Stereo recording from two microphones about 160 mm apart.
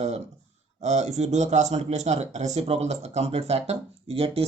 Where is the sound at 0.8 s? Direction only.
45° right (ahead or behind).